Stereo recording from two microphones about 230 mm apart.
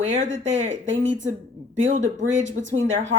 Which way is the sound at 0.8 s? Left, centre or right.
Right.